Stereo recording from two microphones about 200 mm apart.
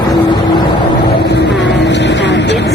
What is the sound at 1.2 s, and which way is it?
Vehicle, 60° left (ahead or behind).